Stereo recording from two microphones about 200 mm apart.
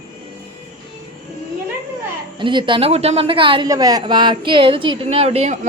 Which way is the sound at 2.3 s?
25° right (ahead or behind).